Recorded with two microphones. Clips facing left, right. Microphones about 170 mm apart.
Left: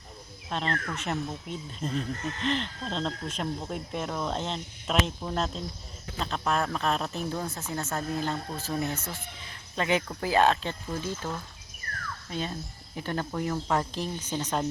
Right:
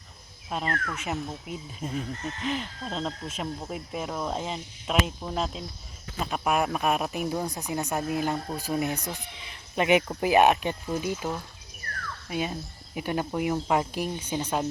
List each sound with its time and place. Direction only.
0.5 s speech: 5° right (ahead or behind)